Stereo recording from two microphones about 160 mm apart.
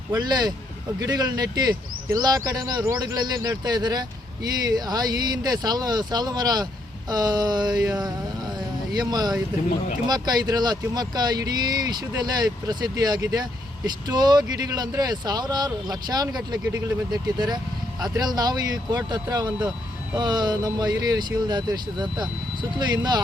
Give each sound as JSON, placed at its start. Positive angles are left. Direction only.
{"t": 0.1, "sound": "speech", "side_deg": -25}
{"t": 8.9, "sound": "speech", "side_deg": -25}